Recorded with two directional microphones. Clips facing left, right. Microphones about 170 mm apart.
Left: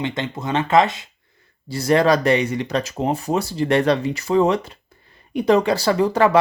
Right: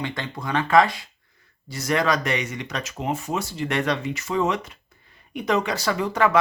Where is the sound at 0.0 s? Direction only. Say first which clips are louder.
Left 5 dB; 20° left (ahead or behind).